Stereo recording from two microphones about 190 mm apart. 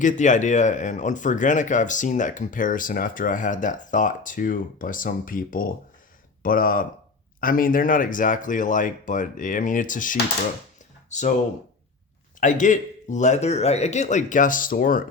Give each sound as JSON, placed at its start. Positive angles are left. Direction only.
{"t": 0.0, "sound": "speech", "side_deg": 40}
{"t": 12.4, "sound": "speech", "side_deg": 40}